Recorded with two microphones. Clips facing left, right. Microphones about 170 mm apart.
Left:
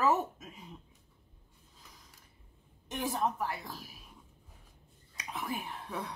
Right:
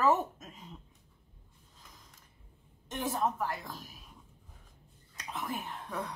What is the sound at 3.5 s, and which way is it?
Speech, 10° left (ahead or behind).